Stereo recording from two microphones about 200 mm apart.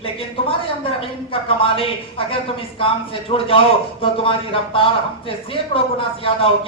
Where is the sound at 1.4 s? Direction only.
25° left (ahead or behind).